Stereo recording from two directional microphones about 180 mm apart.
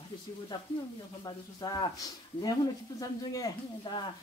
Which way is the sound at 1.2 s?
20° left (ahead or behind).